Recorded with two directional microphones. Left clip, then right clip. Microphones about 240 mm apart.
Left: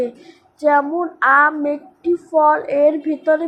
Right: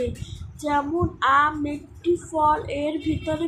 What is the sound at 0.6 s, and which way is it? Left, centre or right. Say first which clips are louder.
Speech: left 8 dB; centre.